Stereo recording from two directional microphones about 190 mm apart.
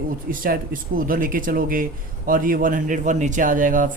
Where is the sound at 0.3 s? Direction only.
50° right (ahead or behind).